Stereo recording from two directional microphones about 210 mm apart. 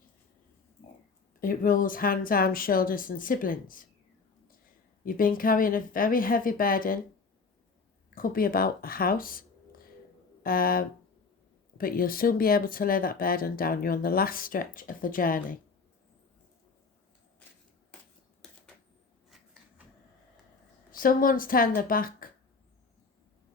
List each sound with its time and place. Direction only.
1.4 s speech: 40° left (ahead or behind)
5.0 s speech: 40° left (ahead or behind)
8.1 s speech: 40° left (ahead or behind)
10.4 s speech: 45° left (ahead or behind)
20.9 s speech: 40° left (ahead or behind)